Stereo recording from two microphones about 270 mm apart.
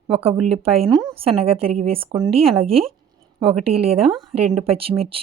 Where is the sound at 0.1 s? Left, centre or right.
Right.